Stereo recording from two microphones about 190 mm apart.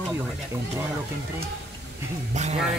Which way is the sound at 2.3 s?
35° right (ahead or behind).